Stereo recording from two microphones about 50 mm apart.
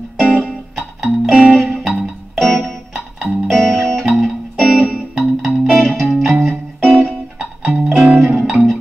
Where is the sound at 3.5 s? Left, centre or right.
Centre.